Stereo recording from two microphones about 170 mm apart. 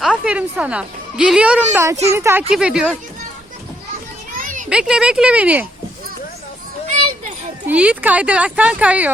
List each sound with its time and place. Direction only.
0.0 s a woman's voice: 5° right (ahead or behind)
2.5 s speech: 5° right (ahead or behind)
4.4 s children playing: 50° right (ahead or behind)
4.7 s speech: 5° right (ahead or behind)
7.7 s speech: 10° right (ahead or behind)